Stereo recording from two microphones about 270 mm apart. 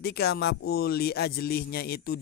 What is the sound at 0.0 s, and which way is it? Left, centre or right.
Speech, left.